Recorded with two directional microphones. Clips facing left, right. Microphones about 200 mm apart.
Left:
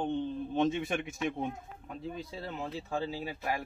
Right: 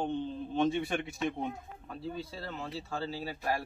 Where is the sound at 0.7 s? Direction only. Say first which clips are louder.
Right 1 dB; 20° left (ahead or behind).